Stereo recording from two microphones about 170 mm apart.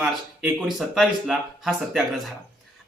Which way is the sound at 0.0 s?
5° right (ahead or behind).